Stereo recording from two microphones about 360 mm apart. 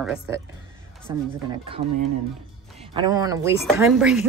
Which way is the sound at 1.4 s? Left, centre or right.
Centre.